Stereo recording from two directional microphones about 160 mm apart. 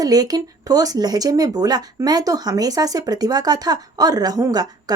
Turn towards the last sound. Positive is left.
turn(degrees=-25)  # may be behind; listen again after turning